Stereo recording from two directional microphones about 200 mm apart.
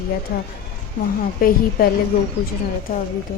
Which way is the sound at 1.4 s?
45° left (ahead or behind).